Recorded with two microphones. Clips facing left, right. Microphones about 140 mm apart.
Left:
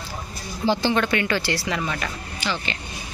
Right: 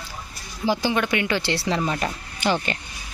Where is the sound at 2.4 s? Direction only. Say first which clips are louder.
Right 6 dB; 50° right (ahead or behind).